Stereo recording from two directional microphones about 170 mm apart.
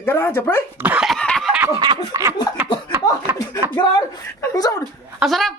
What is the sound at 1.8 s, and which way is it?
Snicker, 20° right (ahead or behind).